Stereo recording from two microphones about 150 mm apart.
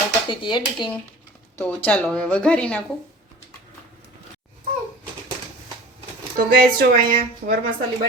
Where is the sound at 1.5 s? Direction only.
10° left (ahead or behind).